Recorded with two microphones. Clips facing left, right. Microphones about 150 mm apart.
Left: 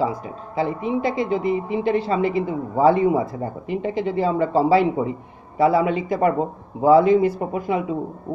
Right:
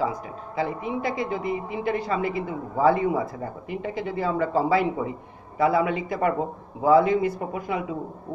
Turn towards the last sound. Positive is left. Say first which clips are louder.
# left 5 dB
turn(degrees=25)  # may be behind; listen again after turning